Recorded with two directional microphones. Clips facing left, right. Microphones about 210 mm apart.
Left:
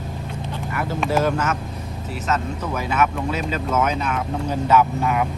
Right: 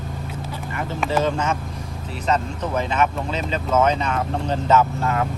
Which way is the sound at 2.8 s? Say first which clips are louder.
Even; 10° left (ahead or behind).